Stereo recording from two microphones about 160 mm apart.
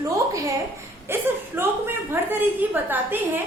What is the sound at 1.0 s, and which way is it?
A woman's voice, 15° right (ahead or behind).